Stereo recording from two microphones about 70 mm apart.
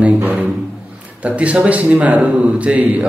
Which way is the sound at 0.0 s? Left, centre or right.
Right.